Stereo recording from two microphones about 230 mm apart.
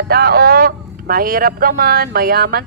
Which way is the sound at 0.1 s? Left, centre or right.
Right.